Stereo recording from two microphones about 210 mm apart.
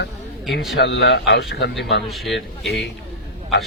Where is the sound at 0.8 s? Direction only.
55° left (ahead or behind).